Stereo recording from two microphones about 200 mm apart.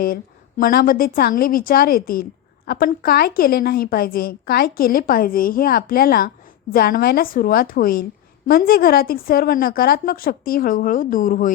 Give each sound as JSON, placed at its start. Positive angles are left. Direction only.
{"t": 0.0, "sound": "a woman's voice", "side_deg": 45}